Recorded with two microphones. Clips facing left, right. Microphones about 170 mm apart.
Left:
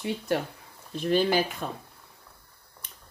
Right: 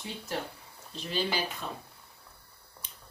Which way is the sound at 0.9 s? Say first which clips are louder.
Left 9 dB; 50° left (ahead or behind).